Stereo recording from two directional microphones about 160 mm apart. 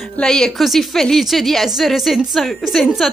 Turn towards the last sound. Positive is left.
turn(degrees=0)  # may be behind; listen again after turning